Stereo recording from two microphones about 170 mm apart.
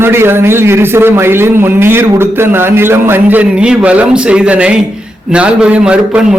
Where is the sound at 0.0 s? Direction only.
15° right (ahead or behind).